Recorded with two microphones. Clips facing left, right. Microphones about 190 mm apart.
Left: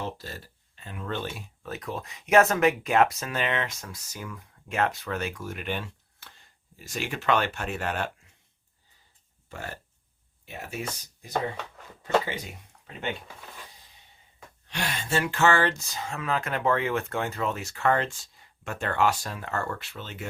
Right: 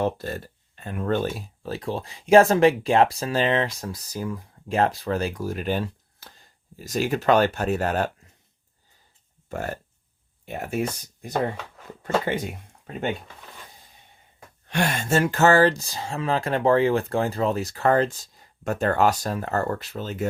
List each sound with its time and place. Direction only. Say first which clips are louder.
0.0 s speech: right 10 dB; 55° right (ahead or behind)
9.5 s speech: right 8 dB; 45° right (ahead or behind)
14.7 s speech: right 7 dB; 50° right (ahead or behind)